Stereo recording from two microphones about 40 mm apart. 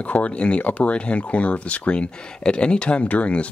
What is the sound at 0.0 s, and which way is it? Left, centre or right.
Speech, left.